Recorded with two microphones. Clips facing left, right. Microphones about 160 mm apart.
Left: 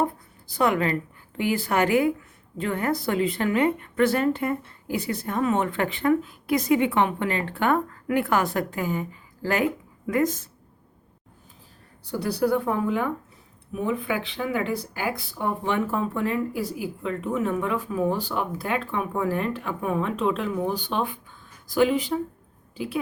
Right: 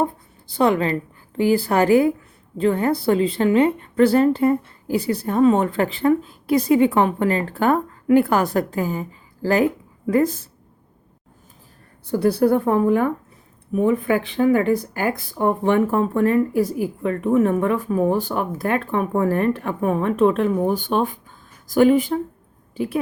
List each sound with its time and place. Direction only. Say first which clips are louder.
0.0 s a sound: right 3 dB; 30° right (ahead or behind)
1.4 s a woman's voice: right 6 dB; 35° right (ahead or behind)
12.0 s speech: right 7 dB; 50° right (ahead or behind)